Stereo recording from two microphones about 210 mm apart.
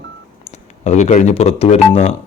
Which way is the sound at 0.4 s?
35° left (ahead or behind).